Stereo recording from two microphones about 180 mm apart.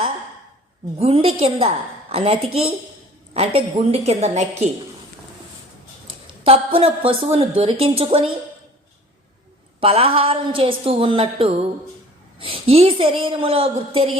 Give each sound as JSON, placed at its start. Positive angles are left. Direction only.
{"t": 0.9, "sound": "a woman's voice", "side_deg": -30}
{"t": 6.4, "sound": "a woman's voice", "side_deg": -30}
{"t": 9.8, "sound": "a woman's voice", "side_deg": -30}